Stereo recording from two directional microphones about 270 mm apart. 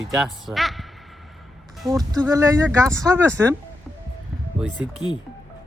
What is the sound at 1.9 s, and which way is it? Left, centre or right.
Speech, centre.